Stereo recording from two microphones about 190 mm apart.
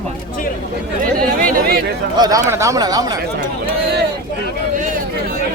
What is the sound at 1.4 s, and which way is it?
Chatter, 45° right (ahead or behind).